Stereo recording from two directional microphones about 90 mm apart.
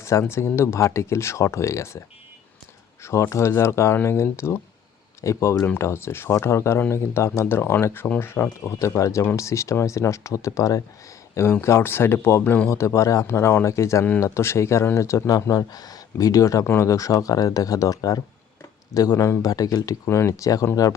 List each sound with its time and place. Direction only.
0.0 s speech: 30° left (ahead or behind)